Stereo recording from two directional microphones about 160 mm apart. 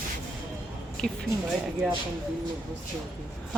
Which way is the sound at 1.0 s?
5° left (ahead or behind).